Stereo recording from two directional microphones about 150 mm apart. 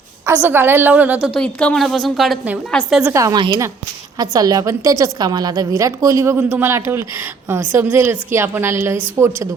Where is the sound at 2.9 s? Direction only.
15° right (ahead or behind).